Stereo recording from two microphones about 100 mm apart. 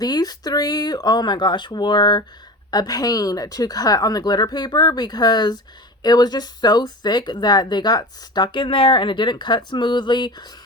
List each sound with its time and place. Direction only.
0.0 s speech: 40° left (ahead or behind)